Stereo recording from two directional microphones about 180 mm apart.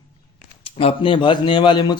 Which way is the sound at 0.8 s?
30° left (ahead or behind).